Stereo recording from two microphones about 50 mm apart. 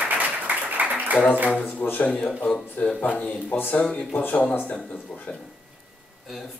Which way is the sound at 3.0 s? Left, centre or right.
Left.